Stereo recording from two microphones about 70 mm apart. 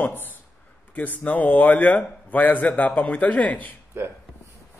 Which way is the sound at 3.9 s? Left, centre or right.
Right.